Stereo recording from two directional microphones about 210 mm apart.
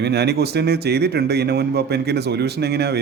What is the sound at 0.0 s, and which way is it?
A man's voice, 50° right (ahead or behind).